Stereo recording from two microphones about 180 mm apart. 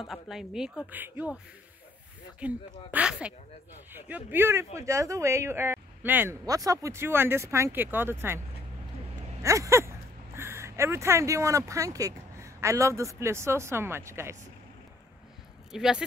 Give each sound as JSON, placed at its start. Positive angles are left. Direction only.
{"t": 0.0, "sound": "speech", "side_deg": 0}
{"t": 2.4, "sound": "speech", "side_deg": -5}
{"t": 9.4, "sound": "speech", "side_deg": -15}
{"t": 15.7, "sound": "speech", "side_deg": -5}